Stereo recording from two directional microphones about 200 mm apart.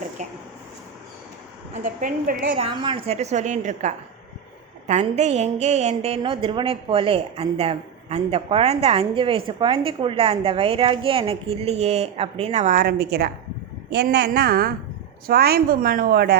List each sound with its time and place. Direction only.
0.2 s a woman's voice: 40° right (ahead or behind)
1.8 s a woman's voice: 40° right (ahead or behind)
2.6 s a woman's voice: 25° right (ahead or behind); by 16.4 s 50° right (ahead or behind)